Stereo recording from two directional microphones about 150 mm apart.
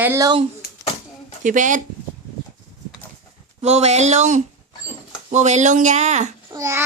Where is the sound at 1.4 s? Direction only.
60° right (ahead or behind).